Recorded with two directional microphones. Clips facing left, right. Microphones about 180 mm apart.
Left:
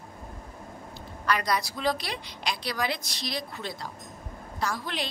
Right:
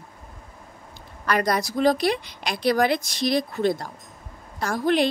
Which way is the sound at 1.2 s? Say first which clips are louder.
Right 5 dB; 50° right (ahead or behind).